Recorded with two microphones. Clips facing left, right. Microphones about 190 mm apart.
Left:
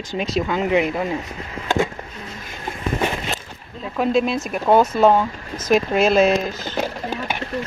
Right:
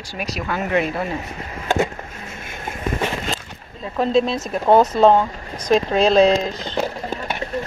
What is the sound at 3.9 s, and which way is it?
Speech, 25° right (ahead or behind).